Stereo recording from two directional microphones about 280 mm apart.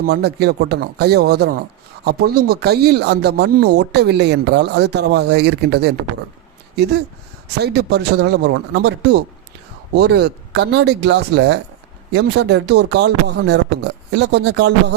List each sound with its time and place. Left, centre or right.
0.0 s speech: right
7.6 s speech: right